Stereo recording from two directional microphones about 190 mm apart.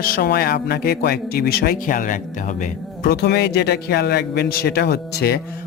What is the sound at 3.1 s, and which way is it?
A man's voice, 60° left (ahead or behind).